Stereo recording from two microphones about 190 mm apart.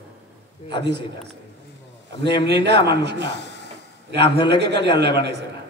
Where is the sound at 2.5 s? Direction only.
60° right (ahead or behind).